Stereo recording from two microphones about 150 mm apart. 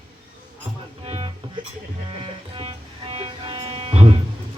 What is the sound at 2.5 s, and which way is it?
Music, 40° right (ahead or behind).